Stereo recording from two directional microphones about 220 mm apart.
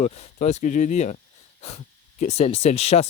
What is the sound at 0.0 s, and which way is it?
Speech, 30° left (ahead or behind).